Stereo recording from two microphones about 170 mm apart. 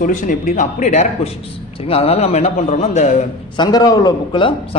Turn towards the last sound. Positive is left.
turn(degrees=30)  # may be behind; listen again after turning